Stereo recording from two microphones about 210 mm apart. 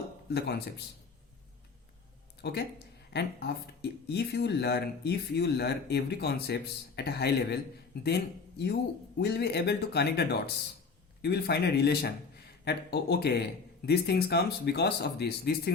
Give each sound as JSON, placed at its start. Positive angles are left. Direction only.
{"t": 2.4, "sound": "speech", "side_deg": 50}